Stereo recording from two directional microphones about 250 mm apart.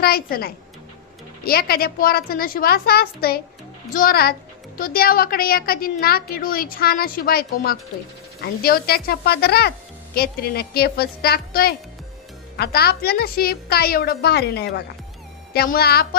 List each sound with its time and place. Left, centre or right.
0.0 s a woman's voice: left